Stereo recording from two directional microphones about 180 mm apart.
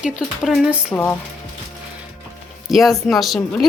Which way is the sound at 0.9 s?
10° left (ahead or behind).